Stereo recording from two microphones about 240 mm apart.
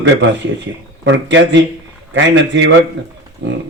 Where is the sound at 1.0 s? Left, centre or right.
Right.